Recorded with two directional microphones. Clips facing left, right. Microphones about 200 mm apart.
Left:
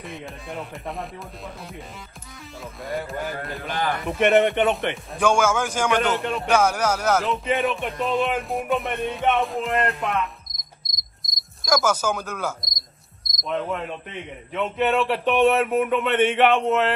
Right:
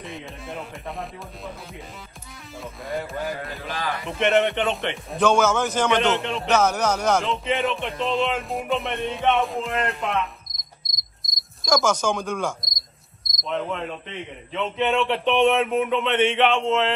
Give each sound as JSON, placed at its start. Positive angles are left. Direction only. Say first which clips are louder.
{"t": 0.0, "sound": "speech", "louder": "even", "side_deg": 0}
{"t": 2.8, "sound": "speech", "louder": "even", "side_deg": 0}
{"t": 3.6, "sound": "speech", "louder": "left 4 dB", "side_deg": 55}
{"t": 5.2, "sound": "speech", "louder": "right 1 dB", "side_deg": 10}